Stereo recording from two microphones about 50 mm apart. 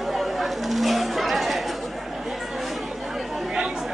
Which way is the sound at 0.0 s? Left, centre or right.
Centre.